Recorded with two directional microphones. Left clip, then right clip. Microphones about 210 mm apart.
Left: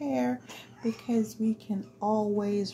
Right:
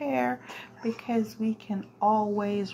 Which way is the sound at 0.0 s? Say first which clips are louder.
Right 3 dB; 5° right (ahead or behind).